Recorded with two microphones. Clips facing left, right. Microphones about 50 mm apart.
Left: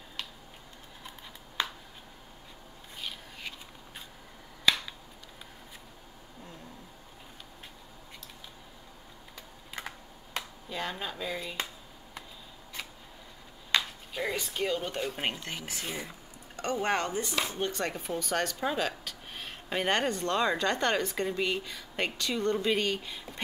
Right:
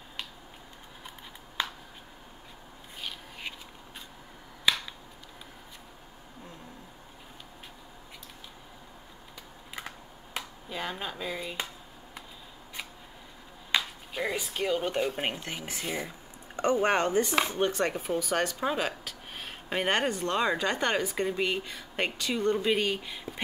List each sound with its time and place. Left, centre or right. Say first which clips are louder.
9.8 s computer keyboard: even; centre
13.7 s chop: even; centre
14.8 s speech: right 4 dB; centre
15.8 s speech: right 5 dB; centre
16.8 s speech: right 2 dB; right
17.6 s speech: right 4 dB; centre